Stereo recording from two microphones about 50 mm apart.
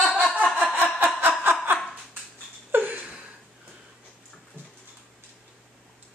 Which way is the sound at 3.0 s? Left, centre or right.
Right.